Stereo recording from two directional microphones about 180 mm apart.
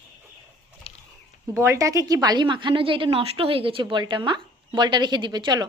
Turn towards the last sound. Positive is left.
turn(degrees=-25)  # may be behind; listen again after turning